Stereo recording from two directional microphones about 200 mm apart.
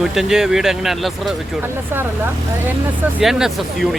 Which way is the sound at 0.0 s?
Centre (ahead or behind).